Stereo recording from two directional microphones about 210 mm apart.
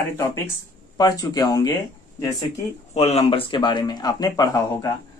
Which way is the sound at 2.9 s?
30° left (ahead or behind).